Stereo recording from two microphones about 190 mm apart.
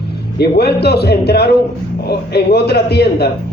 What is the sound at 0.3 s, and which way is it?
A man's voice, 60° left (ahead or behind).